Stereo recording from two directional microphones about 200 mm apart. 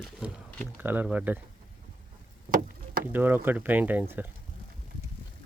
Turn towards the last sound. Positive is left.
turn(degrees=-10)  # may be behind; listen again after turning